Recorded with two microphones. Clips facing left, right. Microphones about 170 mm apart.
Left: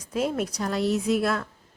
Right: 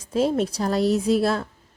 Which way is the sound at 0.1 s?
30° right (ahead or behind).